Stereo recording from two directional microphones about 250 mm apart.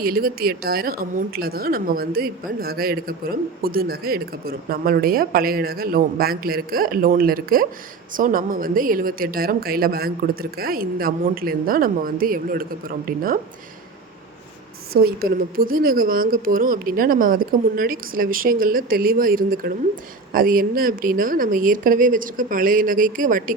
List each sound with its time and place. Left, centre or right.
0.0 s a woman's voice: right
15.0 s a woman's voice: right